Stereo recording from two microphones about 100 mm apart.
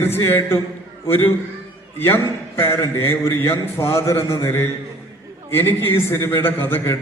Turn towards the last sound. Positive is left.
turn(degrees=25)  # may be behind; listen again after turning